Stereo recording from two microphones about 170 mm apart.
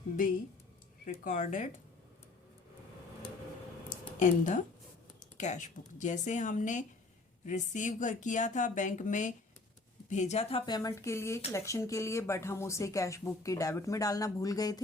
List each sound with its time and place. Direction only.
1.2 s speech: 45° left (ahead or behind)
3.8 s a sound: 50° left (ahead or behind)
5.2 s speech: 45° left (ahead or behind)
10.7 s speech: 20° left (ahead or behind)